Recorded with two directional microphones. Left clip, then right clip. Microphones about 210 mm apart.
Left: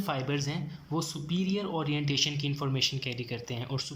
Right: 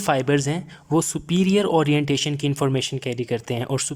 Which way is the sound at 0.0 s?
45° right (ahead or behind).